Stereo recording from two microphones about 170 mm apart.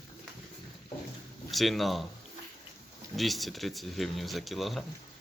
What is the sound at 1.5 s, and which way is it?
Speech, centre (ahead or behind).